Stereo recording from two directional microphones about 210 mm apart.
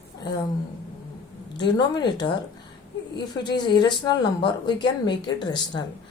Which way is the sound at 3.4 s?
20° left (ahead or behind).